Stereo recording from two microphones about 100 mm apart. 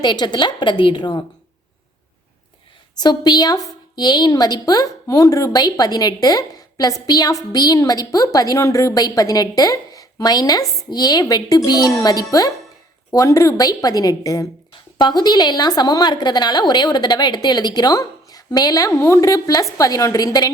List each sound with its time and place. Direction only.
0.0 s a woman's voice: 45° left (ahead or behind)
3.0 s a woman's voice: 45° left (ahead or behind)
14.7 s a woman's voice: 45° left (ahead or behind)